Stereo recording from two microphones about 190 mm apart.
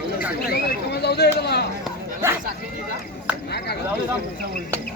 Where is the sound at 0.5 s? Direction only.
55° left (ahead or behind).